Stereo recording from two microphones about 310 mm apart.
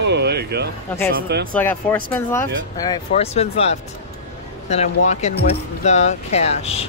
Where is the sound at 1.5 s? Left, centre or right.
Centre.